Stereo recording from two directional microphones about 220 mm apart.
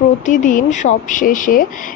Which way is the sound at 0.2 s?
35° left (ahead or behind).